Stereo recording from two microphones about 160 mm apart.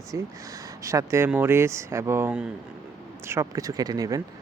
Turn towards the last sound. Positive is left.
turn(degrees=-20)  # may be behind; listen again after turning